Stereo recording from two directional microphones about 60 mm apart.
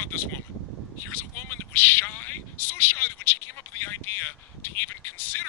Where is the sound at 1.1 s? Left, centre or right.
Left.